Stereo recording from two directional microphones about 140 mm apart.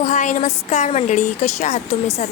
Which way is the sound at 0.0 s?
60° left (ahead or behind).